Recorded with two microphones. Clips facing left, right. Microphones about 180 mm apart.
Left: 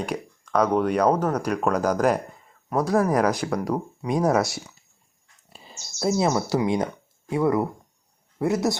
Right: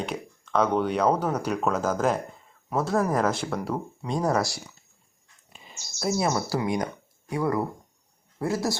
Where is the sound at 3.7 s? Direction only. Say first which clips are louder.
Left 4 dB; 15° left (ahead or behind).